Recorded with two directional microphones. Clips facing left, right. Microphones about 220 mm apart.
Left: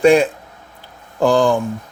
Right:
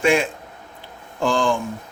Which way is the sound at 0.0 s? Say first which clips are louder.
Left 7 dB; 35° left (ahead or behind).